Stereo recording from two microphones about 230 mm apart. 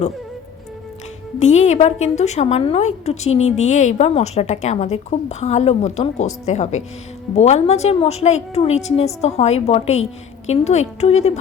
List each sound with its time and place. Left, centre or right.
1.4 s a woman's voice: left